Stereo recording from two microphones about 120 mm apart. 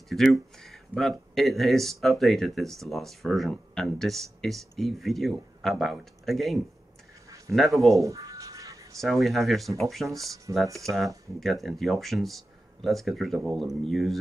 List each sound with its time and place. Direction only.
0.1 s speech: centre (ahead or behind)
8.0 s writing: 30° right (ahead or behind)
9.0 s speech: centre (ahead or behind)
10.5 s speech: 20° right (ahead or behind)
11.3 s speech: centre (ahead or behind)